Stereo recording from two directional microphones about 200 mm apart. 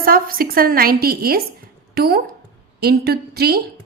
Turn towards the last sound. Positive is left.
turn(degrees=-50)  # may be behind; listen again after turning